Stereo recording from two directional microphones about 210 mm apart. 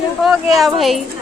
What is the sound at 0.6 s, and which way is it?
Speech, centre (ahead or behind).